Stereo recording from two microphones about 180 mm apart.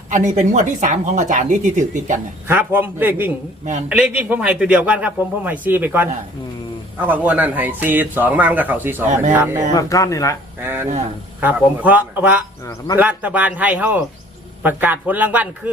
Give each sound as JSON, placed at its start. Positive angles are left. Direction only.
{"t": 0.1, "sound": "speech", "side_deg": -45}
{"t": 2.5, "sound": "a man's voice", "side_deg": -10}
{"t": 9.7, "sound": "speech", "side_deg": 20}
{"t": 10.6, "sound": "a man's voice", "side_deg": -10}